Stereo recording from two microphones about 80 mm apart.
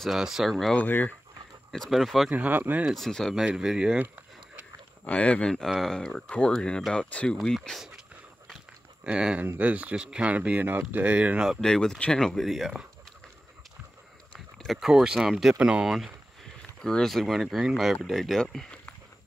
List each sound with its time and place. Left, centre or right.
0.0 s speech: centre
0.7 s speech: left
1.7 s speech: centre
2.3 s speech: right
2.9 s speech: centre
3.3 s speech: centre
5.0 s speech: centre
7.2 s speech: centre
9.0 s speech: centre
11.6 s speech: centre
14.3 s a sound: centre
14.8 s speech: centre
16.8 s speech: centre